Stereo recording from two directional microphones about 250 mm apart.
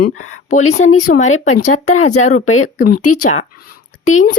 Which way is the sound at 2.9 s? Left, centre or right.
Left.